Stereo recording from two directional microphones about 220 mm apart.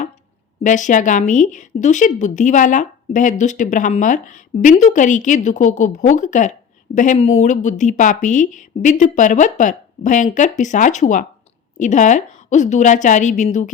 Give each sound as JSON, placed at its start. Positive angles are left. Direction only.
{"t": 0.6, "sound": "speech", "side_deg": 35}